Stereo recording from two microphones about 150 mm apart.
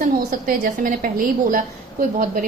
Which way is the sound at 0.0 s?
80° right.